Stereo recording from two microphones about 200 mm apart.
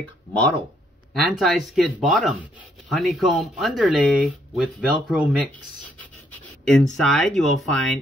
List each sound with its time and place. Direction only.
1.1 s speech: centre (ahead or behind)